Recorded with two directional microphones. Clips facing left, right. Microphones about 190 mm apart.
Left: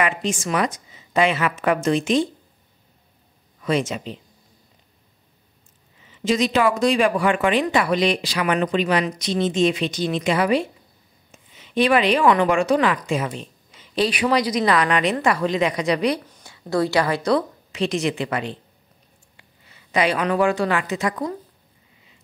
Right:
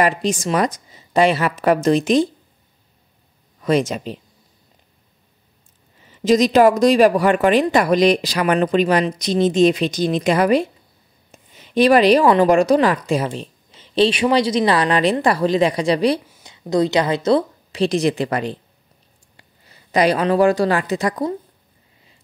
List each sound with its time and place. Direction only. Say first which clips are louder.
0.0 s speech: right 5 dB; 35° right (ahead or behind)
3.6 s speech: right 4 dB; 40° right (ahead or behind)
6.0 s speech: right 6 dB; 40° right (ahead or behind)
16.4 s a woman's voice: right 4 dB; 20° right (ahead or behind)